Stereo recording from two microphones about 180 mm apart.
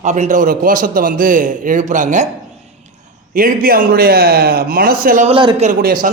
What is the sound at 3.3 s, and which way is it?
A man's voice, 55° right (ahead or behind).